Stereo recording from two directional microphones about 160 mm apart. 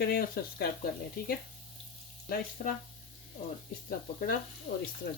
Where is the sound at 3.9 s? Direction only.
65° left (ahead or behind).